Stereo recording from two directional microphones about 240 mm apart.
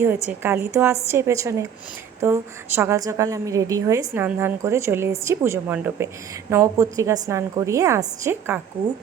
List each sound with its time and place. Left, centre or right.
0.3 s a woman's voice: centre